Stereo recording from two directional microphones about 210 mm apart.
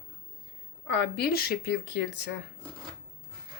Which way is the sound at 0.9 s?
55° left (ahead or behind).